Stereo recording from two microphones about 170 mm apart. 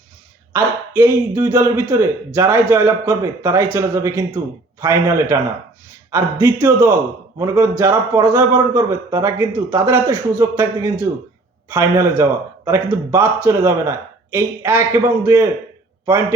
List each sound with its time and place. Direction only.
0.5 s a man's voice: 15° right (ahead or behind)